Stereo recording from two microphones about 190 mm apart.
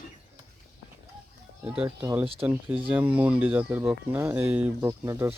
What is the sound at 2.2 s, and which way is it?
Moo, 30° right (ahead or behind).